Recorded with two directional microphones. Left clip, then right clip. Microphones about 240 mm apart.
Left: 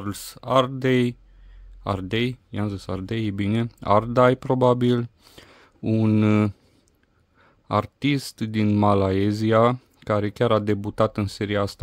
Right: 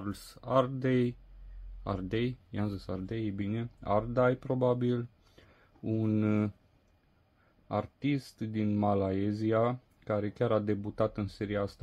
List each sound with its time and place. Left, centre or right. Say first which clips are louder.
0.0 s speech: left 8 dB; left
7.6 s speech: left 10 dB; left